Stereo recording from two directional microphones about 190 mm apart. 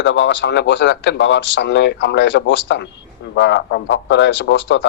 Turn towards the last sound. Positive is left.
turn(degrees=65)  # may be behind; listen again after turning